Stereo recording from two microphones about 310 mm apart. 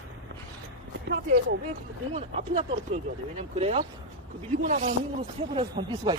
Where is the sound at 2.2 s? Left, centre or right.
Centre.